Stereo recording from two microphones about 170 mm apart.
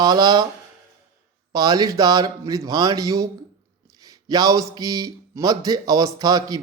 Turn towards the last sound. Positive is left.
turn(degrees=-20)  # may be behind; listen again after turning